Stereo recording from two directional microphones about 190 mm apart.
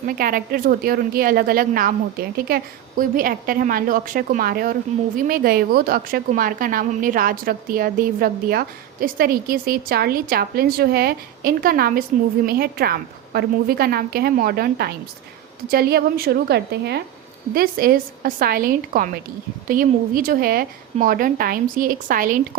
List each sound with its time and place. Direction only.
0.0 s a woman's voice: 45° right (ahead or behind)
3.0 s a woman's voice: 45° right (ahead or behind)